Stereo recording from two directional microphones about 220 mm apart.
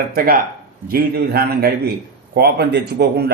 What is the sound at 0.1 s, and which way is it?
Speech, 40° right (ahead or behind).